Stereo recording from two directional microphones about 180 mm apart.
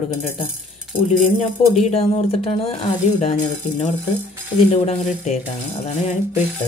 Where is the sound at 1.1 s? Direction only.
45° left (ahead or behind).